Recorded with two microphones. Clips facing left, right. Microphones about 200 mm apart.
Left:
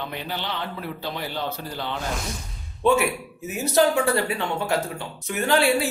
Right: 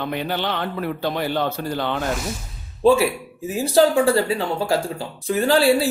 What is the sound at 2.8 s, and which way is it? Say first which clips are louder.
Speech: right 4 dB; 30° right (ahead or behind).